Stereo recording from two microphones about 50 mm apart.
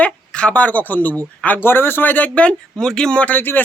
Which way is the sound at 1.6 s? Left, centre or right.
Left.